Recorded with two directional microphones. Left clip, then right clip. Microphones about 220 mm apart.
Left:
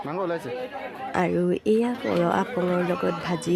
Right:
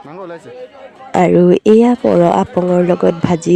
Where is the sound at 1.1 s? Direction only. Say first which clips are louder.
Right 15 dB; 40° right (ahead or behind).